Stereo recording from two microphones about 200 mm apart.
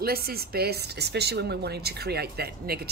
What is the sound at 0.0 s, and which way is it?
A woman's voice, 50° right (ahead or behind).